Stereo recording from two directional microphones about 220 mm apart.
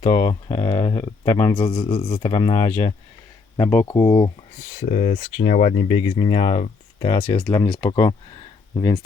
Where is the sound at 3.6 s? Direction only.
10° left (ahead or behind).